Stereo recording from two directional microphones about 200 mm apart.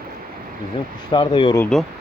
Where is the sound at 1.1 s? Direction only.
25° left (ahead or behind).